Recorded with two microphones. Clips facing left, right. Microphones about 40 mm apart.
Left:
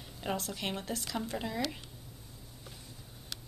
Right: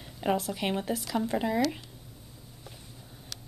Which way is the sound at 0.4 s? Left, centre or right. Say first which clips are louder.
Right 7 dB; centre.